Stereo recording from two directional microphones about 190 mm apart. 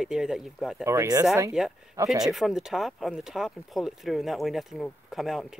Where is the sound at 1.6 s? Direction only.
5° right (ahead or behind).